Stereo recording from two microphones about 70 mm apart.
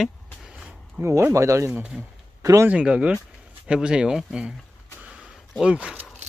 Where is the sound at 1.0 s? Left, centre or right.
Right.